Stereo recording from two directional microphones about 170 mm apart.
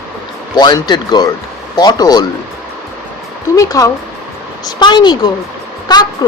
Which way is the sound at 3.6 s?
20° left (ahead or behind).